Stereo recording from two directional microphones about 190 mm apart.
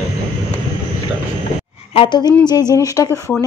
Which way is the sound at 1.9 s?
25° left (ahead or behind).